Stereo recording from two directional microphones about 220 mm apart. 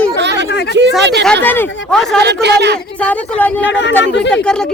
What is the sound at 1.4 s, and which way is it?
Speech, 10° left (ahead or behind).